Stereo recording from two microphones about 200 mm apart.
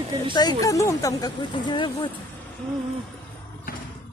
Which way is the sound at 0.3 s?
20° left (ahead or behind).